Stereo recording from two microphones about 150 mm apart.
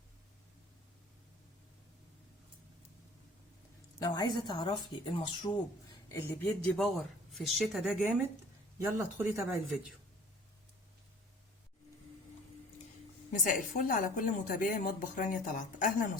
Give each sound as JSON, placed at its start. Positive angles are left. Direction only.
{"t": 4.0, "sound": "speech", "side_deg": 25}
{"t": 6.1, "sound": "speech", "side_deg": 15}
{"t": 6.7, "sound": "speech", "side_deg": 0}
{"t": 8.9, "sound": "speech", "side_deg": -20}
{"t": 13.3, "sound": "a woman's voice", "side_deg": 60}